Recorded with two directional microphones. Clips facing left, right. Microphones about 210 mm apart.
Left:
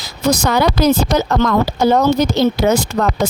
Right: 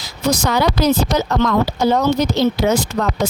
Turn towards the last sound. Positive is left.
turn(degrees=50)  # may be behind; listen again after turning